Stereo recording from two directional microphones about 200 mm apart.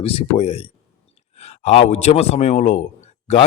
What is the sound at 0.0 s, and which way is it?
A man's voice, 30° left (ahead or behind).